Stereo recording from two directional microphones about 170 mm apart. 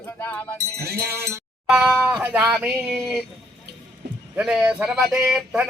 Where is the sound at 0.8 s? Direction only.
70° right (ahead or behind).